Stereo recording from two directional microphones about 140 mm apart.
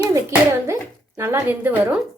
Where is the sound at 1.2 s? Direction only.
20° right (ahead or behind).